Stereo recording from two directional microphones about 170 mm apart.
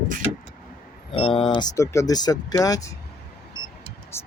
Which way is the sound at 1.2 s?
35° left (ahead or behind).